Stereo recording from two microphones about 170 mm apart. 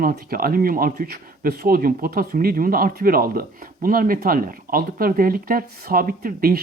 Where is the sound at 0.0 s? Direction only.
60° right (ahead or behind).